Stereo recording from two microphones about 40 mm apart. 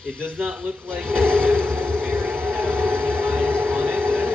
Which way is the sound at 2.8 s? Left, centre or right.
Right.